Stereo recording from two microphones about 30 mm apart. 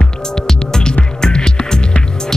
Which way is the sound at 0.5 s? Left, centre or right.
Left.